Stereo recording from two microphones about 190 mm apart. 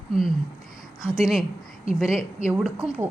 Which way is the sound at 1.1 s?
5° right (ahead or behind).